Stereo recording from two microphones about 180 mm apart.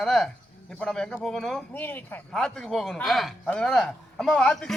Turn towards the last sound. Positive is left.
turn(degrees=5)  # may be behind; listen again after turning